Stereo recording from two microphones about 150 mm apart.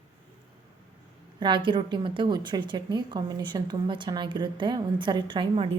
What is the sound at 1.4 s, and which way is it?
A woman's voice, 30° right (ahead or behind).